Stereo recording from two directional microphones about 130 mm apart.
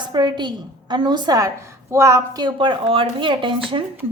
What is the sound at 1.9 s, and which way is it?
A woman's voice, 20° right (ahead or behind).